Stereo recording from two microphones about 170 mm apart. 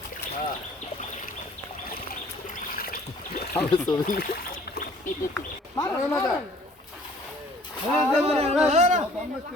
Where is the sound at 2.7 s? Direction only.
60° left (ahead or behind).